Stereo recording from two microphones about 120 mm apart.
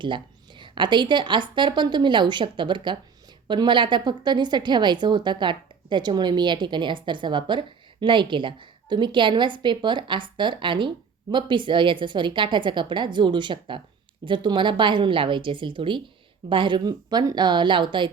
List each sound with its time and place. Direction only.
0.6 s a woman's voice: 40° right (ahead or behind)